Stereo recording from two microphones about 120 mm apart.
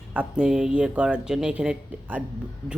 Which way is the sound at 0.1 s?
10° right (ahead or behind).